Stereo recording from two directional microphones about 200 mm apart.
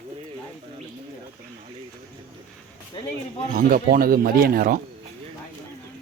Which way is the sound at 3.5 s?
45° right (ahead or behind).